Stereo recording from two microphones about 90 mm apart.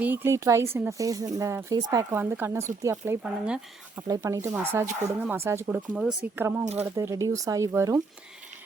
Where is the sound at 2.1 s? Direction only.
25° right (ahead or behind).